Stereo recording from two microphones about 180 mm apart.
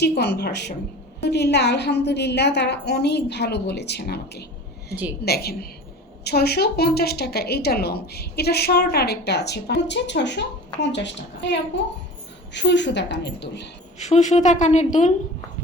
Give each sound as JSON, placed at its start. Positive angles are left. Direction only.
{"t": 0.0, "sound": "a woman's voice", "side_deg": 65}
{"t": 12.5, "sound": "a woman's voice", "side_deg": 80}
{"t": 14.0, "sound": "a woman's voice", "side_deg": 40}